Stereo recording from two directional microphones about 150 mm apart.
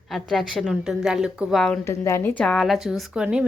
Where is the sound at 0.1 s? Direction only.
Centre (ahead or behind).